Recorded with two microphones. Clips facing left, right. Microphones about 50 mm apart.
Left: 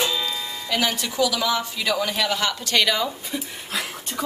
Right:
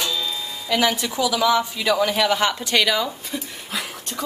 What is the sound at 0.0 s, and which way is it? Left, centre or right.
Music, left.